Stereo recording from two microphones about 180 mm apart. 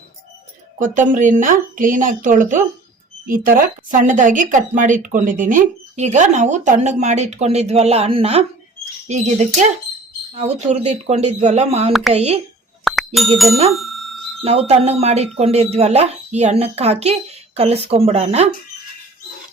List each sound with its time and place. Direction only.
0.8 s a woman's voice: 45° right (ahead or behind)
12.8 s plop: centre (ahead or behind)
13.1 s speech: centre (ahead or behind)
13.7 s bicycle bell: centre (ahead or behind)
14.4 s speech: 35° right (ahead or behind)